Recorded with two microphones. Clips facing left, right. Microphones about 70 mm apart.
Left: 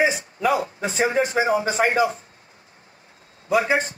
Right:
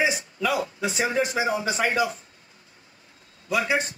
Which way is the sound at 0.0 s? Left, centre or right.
Left.